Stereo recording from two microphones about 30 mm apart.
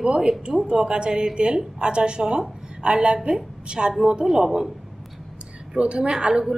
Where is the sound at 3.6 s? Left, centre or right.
Right.